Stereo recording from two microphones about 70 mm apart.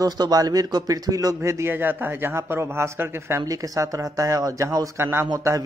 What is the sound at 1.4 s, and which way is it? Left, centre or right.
Speech, right.